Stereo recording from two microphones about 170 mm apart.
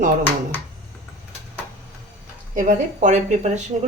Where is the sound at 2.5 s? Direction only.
45° right (ahead or behind).